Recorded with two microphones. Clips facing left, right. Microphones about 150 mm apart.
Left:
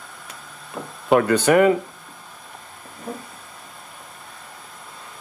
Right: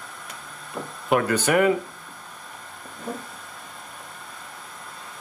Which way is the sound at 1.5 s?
30° left (ahead or behind).